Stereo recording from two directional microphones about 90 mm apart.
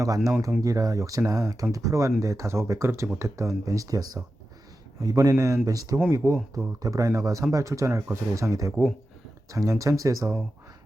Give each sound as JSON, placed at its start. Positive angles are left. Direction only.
{"t": 0.6, "sound": "speech", "side_deg": -40}